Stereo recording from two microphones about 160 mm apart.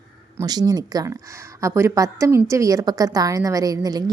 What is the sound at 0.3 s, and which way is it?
A woman's voice, 25° right (ahead or behind).